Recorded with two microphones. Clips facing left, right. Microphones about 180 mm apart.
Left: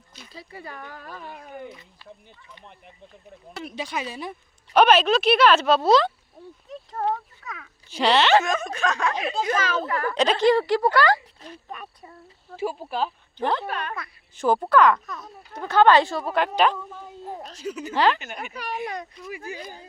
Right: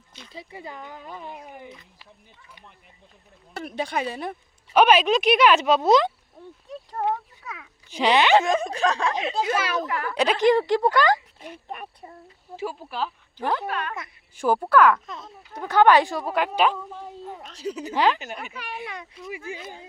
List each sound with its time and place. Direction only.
0.3 s speech: 20° right (ahead or behind)
3.5 s speech: 50° right (ahead or behind)
4.7 s a child's voice: 10° right (ahead or behind)
8.4 s snicker: 30° right (ahead or behind)
9.4 s a child's voice: 10° right (ahead or behind)
12.6 s speech: 20° left (ahead or behind)
13.4 s a child's voice: 5° right (ahead or behind)
15.0 s speech: 25° right (ahead or behind)
15.5 s a child's voice: 15° right (ahead or behind)
17.2 s a woman's voice: 35° left (ahead or behind)
17.6 s snicker: 35° right (ahead or behind)
17.9 s a child's voice: 15° right (ahead or behind)
18.5 s a woman's voice: 40° left (ahead or behind)